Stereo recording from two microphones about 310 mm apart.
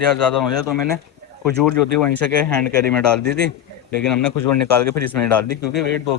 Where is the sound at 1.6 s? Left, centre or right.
Centre.